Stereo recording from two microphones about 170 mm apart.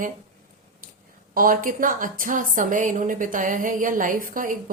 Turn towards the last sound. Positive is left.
turn(degrees=-50)  # may be behind; listen again after turning